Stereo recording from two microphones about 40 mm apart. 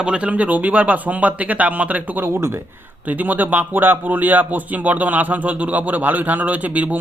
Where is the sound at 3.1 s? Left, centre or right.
Right.